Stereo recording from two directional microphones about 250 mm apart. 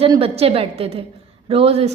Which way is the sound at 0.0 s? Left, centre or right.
Right.